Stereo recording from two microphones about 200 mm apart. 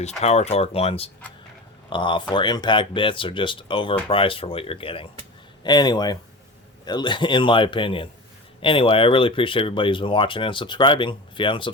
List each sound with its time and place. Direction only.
0.2 s speech: 30° left (ahead or behind)